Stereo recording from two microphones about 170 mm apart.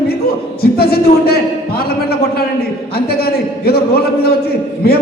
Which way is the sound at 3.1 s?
65° left (ahead or behind).